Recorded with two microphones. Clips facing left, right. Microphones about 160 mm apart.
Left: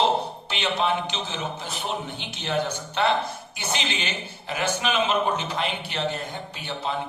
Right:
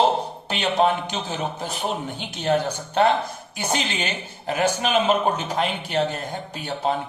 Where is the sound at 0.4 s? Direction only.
45° right (ahead or behind).